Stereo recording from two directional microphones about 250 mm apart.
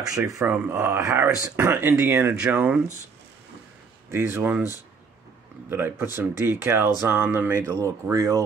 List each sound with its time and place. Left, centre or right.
0.1 s speech: centre
4.1 s speech: centre